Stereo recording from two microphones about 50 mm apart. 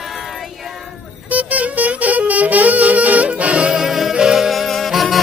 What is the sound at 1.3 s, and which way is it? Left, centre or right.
Saxophone, right.